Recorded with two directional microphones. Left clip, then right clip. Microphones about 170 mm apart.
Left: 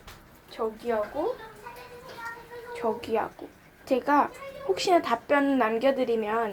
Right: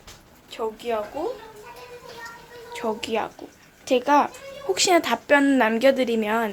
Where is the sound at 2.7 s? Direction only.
15° right (ahead or behind).